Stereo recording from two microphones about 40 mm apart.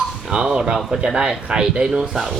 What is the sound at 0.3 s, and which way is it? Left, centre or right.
Speech, right.